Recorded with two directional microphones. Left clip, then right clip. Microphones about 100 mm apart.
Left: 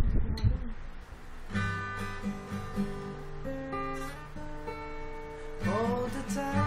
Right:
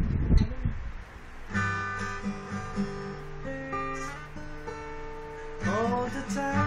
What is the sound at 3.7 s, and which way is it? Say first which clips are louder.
Guitar: right 4 dB; 20° left (ahead or behind).